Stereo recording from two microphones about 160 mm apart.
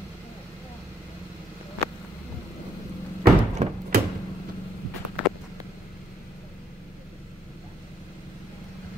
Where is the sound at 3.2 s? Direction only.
60° right (ahead or behind).